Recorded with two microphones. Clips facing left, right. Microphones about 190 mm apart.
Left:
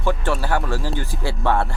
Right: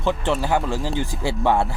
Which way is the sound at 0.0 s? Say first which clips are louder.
Right 1 dB; 20° right (ahead or behind).